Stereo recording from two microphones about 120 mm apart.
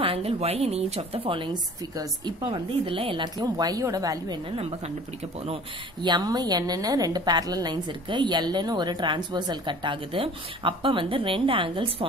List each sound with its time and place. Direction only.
0.0 s a woman's voice: 55° right (ahead or behind)
3.3 s a woman's voice: 35° right (ahead or behind)
4.6 s a woman's voice: 55° right (ahead or behind)
6.0 s a woman's voice: 35° right (ahead or behind)